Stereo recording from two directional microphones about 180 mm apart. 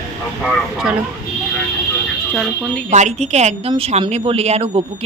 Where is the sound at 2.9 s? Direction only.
40° right (ahead or behind).